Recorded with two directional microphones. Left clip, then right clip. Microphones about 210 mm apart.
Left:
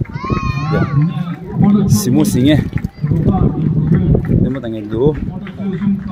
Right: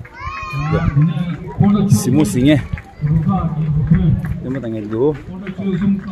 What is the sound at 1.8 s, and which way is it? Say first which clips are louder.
Speech: left 1 dB; 15° left (ahead or behind).